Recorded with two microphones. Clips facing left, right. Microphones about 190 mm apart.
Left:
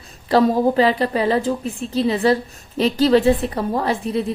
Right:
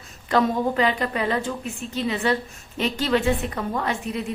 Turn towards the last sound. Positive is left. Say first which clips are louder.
# left 6 dB
turn(degrees=35)  # may be behind; listen again after turning